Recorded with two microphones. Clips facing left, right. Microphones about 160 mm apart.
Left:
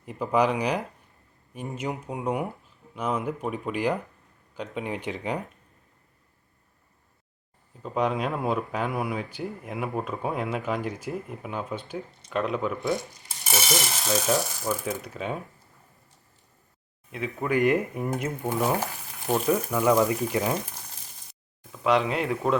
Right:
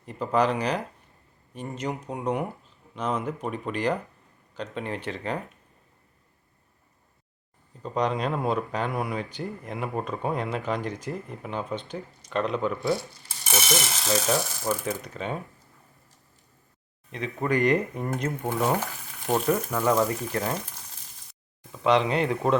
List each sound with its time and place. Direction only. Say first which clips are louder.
0.0 s speech: even; 10° left (ahead or behind)
7.8 s speech: even; 5° left (ahead or behind)
17.1 s speech: right 1 dB; 5° left (ahead or behind)
19.3 s speech: even; 5° left (ahead or behind)
19.8 s speech: left 4 dB; 15° left (ahead or behind)
21.7 s speech: right 1 dB; centre (ahead or behind)